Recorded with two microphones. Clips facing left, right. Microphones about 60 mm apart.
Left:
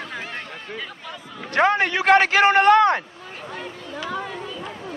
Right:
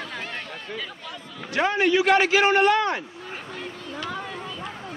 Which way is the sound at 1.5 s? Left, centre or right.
Left.